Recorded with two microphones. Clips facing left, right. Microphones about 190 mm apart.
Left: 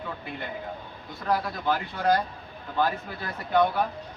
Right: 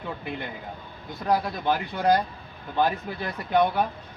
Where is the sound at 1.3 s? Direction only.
15° right (ahead or behind).